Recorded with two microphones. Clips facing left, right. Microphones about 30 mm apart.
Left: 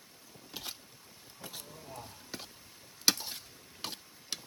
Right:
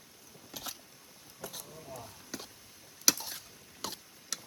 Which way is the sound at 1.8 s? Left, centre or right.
Left.